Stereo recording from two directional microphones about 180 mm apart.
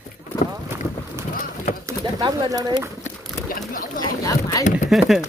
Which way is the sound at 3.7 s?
50° left (ahead or behind).